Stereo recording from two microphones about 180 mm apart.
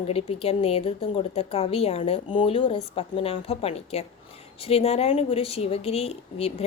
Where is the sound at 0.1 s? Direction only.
30° left (ahead or behind).